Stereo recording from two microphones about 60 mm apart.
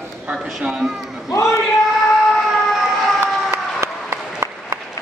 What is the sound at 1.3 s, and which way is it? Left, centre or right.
Speech, left.